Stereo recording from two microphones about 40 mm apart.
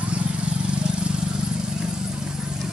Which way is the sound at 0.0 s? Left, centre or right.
Right.